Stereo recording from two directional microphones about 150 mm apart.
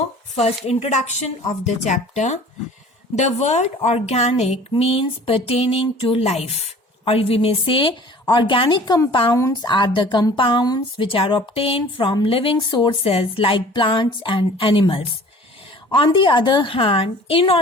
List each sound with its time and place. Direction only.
0.3 s a woman's voice: 45° left (ahead or behind)
16.1 s a woman's voice: 30° left (ahead or behind)